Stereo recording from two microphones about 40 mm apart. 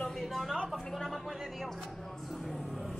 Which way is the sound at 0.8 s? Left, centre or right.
Centre.